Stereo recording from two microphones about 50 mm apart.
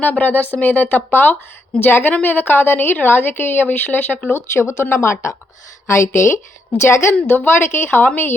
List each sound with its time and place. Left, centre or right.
0.0 s a woman's voice: left
4.4 s a woman's voice: left
7.3 s a woman's voice: left